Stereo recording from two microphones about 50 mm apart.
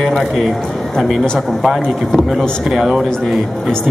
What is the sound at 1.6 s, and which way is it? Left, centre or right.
A man's voice, centre.